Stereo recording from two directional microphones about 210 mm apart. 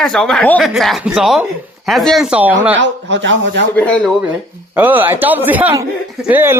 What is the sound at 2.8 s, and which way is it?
Speech, 60° right (ahead or behind).